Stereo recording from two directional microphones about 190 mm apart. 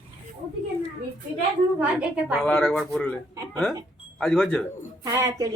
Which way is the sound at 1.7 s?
5° right (ahead or behind).